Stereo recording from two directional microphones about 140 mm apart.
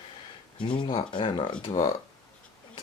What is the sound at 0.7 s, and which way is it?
Speech, 40° left (ahead or behind).